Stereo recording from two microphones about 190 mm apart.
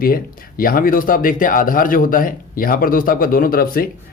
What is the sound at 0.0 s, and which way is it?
Speech, 50° left (ahead or behind).